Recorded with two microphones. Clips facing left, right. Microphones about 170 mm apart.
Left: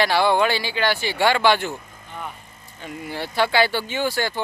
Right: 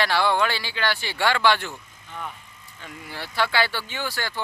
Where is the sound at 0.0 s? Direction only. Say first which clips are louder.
Left 4 dB; 15° left (ahead or behind).